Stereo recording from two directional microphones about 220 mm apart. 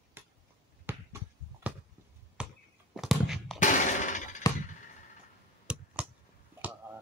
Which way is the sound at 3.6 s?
35° left (ahead or behind).